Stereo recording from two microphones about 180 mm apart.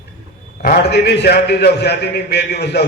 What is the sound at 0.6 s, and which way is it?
A man's voice, 60° left (ahead or behind).